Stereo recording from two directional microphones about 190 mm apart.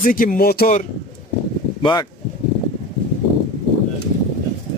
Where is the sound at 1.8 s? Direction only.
25° left (ahead or behind).